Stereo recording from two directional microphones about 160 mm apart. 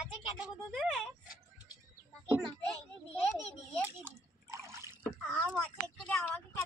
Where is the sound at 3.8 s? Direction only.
15° right (ahead or behind).